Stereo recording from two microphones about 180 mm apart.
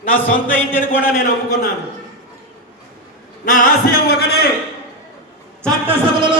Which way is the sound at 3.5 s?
50° left (ahead or behind).